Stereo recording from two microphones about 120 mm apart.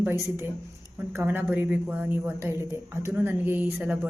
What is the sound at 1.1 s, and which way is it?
A woman's voice, 15° right (ahead or behind).